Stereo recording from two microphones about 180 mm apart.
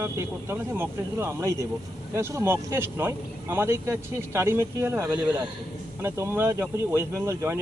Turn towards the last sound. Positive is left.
turn(degrees=-15)  # may be behind; listen again after turning